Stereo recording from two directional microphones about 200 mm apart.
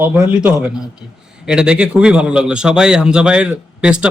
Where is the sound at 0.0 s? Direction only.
5° right (ahead or behind).